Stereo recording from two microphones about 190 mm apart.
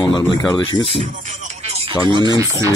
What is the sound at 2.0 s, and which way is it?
Speech, centre (ahead or behind).